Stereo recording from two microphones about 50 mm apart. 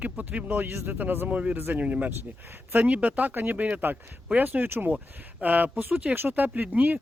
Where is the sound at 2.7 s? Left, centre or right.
Right.